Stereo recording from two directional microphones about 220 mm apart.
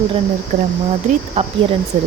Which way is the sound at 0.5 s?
35° right (ahead or behind).